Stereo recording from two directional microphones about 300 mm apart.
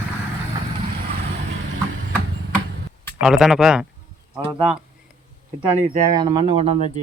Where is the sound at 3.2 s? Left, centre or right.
Centre.